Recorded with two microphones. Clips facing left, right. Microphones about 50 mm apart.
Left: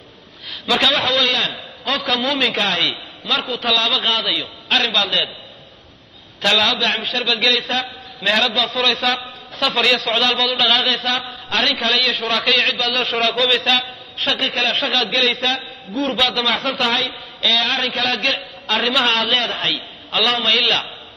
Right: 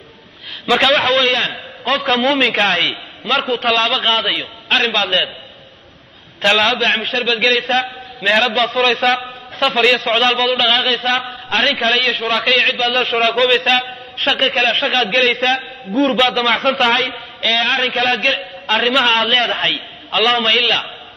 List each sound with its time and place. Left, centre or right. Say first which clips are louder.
0.7 s a man's voice: right 4 dB; right
6.4 s a man's voice: right 3 dB; right